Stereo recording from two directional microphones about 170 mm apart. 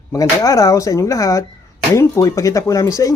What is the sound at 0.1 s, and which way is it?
A man's voice, 20° left (ahead or behind).